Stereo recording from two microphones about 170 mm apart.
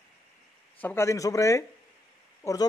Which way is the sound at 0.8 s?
15° left (ahead or behind).